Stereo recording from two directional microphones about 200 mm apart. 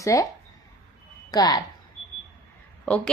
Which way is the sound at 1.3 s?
20° left (ahead or behind).